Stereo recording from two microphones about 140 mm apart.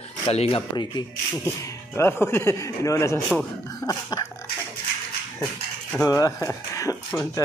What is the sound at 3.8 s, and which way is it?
Dog, 30° left (ahead or behind).